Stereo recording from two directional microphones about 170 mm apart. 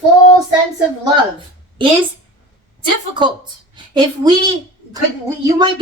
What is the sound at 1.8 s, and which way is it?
Speech, 30° right (ahead or behind).